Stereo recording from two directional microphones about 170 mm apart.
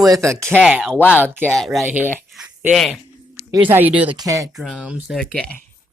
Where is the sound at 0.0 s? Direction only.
20° right (ahead or behind).